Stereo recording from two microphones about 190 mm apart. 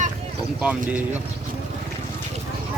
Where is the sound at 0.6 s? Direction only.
5° right (ahead or behind).